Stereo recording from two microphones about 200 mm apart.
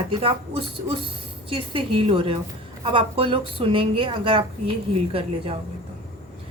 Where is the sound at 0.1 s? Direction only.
25° right (ahead or behind).